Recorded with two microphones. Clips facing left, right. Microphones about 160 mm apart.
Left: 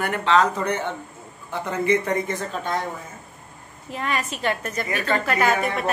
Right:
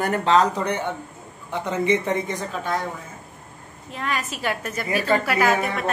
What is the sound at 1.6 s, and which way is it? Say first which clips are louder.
Speech: even; 20° right (ahead or behind).